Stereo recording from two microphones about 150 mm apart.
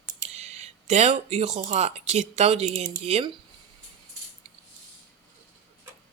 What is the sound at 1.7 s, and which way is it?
Speech, 50° right (ahead or behind).